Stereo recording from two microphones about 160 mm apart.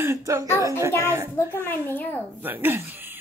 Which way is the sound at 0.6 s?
20° right (ahead or behind).